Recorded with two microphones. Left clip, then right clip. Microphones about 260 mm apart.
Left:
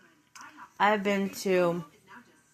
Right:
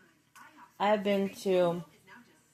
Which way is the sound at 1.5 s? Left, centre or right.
Left.